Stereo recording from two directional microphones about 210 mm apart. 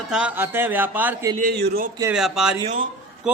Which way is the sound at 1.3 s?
45° right (ahead or behind).